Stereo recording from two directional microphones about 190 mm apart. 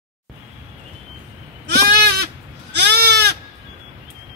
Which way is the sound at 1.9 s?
55° right (ahead or behind).